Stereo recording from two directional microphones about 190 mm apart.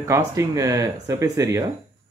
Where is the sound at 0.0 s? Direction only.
15° right (ahead or behind).